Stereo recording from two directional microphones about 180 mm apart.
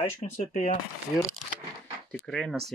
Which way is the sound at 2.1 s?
5° left (ahead or behind).